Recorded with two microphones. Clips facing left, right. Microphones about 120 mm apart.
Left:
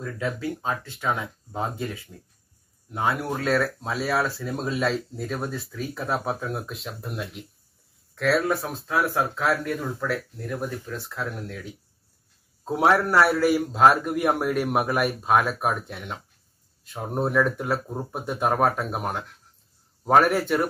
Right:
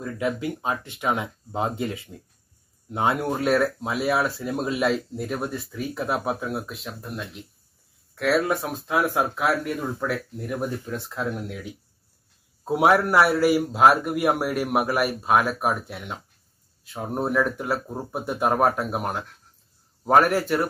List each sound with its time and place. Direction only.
0.0 s speech: 15° right (ahead or behind)
12.6 s speech: 10° right (ahead or behind)